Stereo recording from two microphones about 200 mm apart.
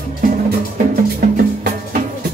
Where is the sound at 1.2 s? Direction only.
45° right (ahead or behind).